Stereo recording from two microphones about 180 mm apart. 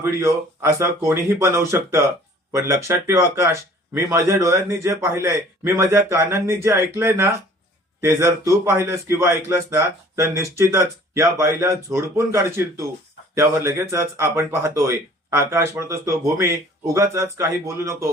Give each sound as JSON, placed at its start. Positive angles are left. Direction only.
{"t": 0.0, "sound": "a man's voice", "side_deg": -15}